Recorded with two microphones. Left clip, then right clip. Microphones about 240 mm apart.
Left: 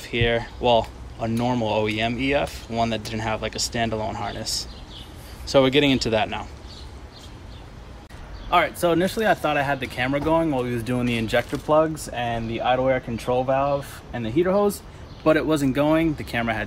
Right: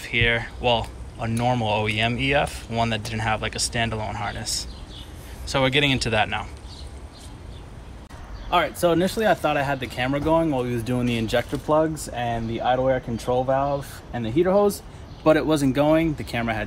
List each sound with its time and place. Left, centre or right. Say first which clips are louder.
0.0 s speech: right 1 dB; centre
8.5 s speech: left 1 dB; centre
14.2 s speech: right 1 dB; centre